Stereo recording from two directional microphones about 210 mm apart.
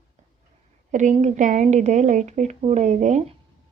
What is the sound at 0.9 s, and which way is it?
Speech, 35° right (ahead or behind).